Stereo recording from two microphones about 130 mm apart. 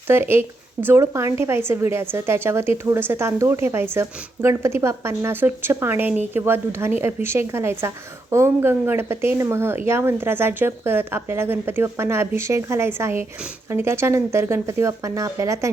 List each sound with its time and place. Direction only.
0.1 s speech: 20° right (ahead or behind)